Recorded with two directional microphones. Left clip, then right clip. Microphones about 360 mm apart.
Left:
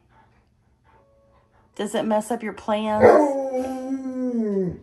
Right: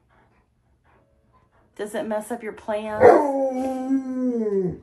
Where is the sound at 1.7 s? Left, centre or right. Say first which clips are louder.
Left 4 dB; left.